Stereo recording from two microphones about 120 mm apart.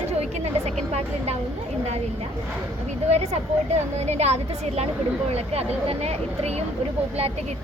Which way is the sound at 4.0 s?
65° right (ahead or behind).